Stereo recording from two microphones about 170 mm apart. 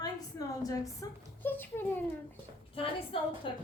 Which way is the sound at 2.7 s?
30° left (ahead or behind).